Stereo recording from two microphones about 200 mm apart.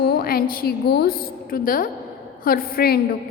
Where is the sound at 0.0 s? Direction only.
50° left (ahead or behind).